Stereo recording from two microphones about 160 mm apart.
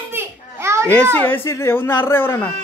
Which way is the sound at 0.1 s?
15° right (ahead or behind).